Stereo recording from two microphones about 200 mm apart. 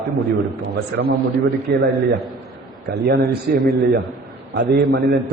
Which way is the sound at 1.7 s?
55° right (ahead or behind).